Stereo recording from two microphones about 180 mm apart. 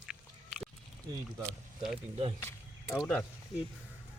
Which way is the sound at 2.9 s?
5° left (ahead or behind).